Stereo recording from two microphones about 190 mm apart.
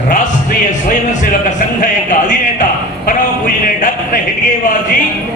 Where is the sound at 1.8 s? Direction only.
40° left (ahead or behind).